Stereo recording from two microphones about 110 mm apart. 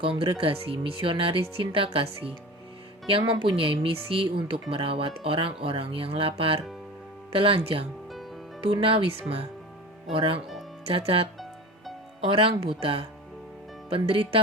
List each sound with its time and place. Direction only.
0.0 s speech: 55° right (ahead or behind)